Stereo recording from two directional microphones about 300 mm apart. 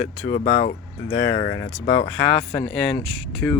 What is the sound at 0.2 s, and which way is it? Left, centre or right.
Speech, left.